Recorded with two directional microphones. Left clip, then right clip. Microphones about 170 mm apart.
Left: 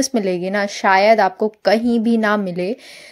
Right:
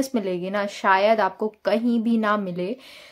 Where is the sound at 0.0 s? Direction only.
30° left (ahead or behind).